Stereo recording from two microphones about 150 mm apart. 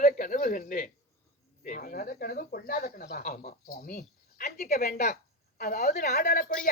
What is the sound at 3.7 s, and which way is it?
Speech, 75° left (ahead or behind).